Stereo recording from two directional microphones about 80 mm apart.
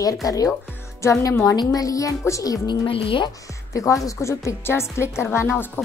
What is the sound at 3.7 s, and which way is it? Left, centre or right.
A woman's voice, left.